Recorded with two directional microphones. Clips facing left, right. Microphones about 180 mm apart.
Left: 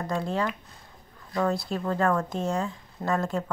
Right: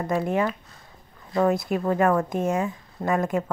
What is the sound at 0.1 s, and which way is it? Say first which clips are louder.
Speech: right 5 dB; 15° right (ahead or behind).